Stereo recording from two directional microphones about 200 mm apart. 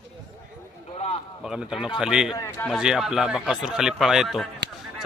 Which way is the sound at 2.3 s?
15° left (ahead or behind).